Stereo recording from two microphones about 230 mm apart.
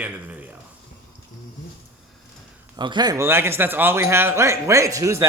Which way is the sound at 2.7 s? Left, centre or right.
Centre.